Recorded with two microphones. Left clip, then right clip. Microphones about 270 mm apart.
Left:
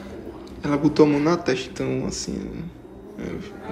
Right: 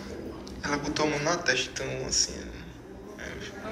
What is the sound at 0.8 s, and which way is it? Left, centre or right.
Speech, centre.